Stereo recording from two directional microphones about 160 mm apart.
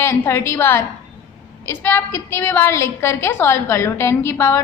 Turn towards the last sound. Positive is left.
turn(degrees=15)  # may be behind; listen again after turning